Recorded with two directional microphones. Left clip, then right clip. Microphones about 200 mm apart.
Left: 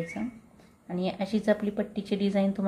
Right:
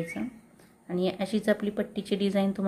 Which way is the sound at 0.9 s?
15° right (ahead or behind).